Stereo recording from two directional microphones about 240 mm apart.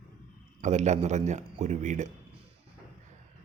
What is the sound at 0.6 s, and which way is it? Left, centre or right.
Speech, right.